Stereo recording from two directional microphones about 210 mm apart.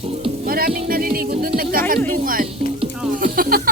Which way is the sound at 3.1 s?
40° right (ahead or behind).